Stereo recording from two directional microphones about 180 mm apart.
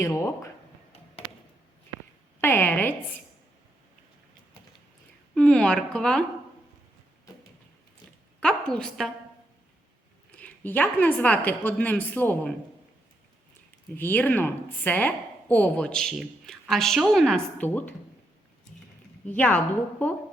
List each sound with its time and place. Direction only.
0.0 s speech: 15° left (ahead or behind)
2.4 s a woman's voice: 10° left (ahead or behind)
5.3 s a woman's voice: 5° left (ahead or behind)
8.4 s a woman's voice: 5° left (ahead or behind)
10.3 s speech: 10° left (ahead or behind)
13.9 s speech: 10° left (ahead or behind)
19.3 s speech: 10° left (ahead or behind)